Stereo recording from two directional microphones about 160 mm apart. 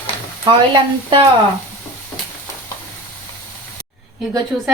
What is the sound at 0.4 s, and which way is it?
Speech, 35° right (ahead or behind).